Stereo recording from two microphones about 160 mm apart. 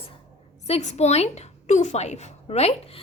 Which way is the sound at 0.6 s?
45° left (ahead or behind).